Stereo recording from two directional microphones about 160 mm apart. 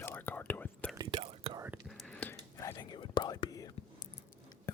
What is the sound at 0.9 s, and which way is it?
Whispering, 35° right (ahead or behind).